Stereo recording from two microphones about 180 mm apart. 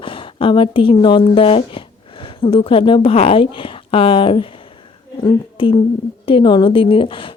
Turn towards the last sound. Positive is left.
turn(degrees=30)  # may be behind; listen again after turning